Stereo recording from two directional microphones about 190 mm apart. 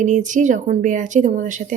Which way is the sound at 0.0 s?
40° right (ahead or behind).